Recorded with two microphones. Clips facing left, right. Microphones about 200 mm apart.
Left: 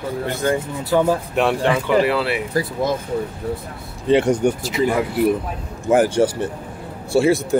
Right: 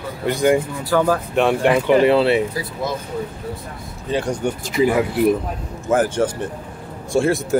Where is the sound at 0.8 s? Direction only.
25° left (ahead or behind).